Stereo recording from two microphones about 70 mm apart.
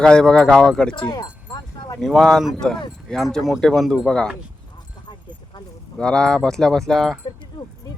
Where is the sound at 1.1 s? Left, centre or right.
Left.